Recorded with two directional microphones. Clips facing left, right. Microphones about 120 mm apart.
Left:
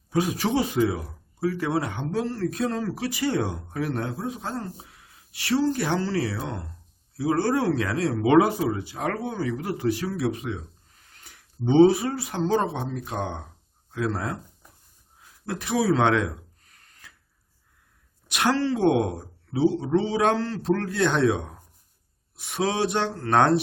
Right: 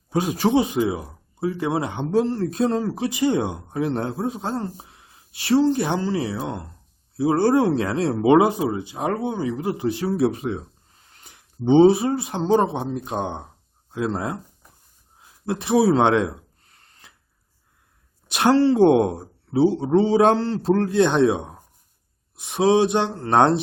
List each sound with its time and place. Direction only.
0.1 s speech: 25° right (ahead or behind)
11.1 s speech: 20° right (ahead or behind)
15.2 s a sound: 25° right (ahead or behind)
18.3 s speech: 30° right (ahead or behind)